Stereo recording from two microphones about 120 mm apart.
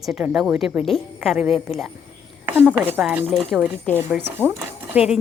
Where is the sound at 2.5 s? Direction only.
15° right (ahead or behind).